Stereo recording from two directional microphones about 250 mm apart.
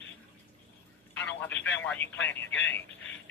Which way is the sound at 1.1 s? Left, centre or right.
Centre.